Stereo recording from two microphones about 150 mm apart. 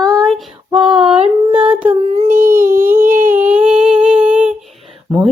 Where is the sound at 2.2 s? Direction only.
65° right (ahead or behind).